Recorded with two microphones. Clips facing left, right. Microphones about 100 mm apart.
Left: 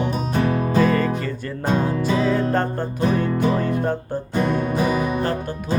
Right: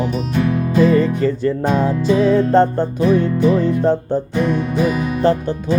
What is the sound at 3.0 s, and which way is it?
Music, 40° left (ahead or behind).